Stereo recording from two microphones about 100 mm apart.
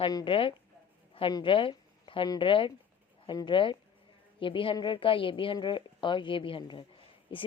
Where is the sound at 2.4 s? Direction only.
55° left (ahead or behind).